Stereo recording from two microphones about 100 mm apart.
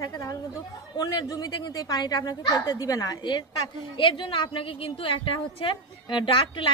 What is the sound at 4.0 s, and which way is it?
A woman's voice, 60° left (ahead or behind).